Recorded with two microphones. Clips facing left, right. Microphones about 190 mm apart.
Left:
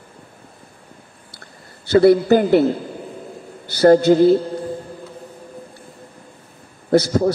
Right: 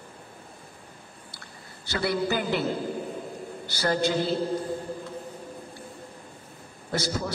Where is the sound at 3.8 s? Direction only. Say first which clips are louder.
Left 14 dB; 45° left (ahead or behind).